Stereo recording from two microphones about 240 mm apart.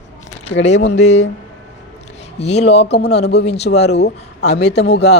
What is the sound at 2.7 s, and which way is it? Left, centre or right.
Speech, left.